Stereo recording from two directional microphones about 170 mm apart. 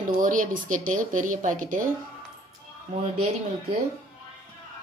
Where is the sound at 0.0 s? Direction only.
50° right (ahead or behind).